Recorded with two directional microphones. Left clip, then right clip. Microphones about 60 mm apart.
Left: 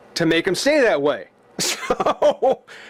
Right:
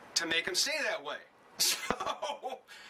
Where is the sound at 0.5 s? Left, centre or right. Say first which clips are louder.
Left 16 dB; left.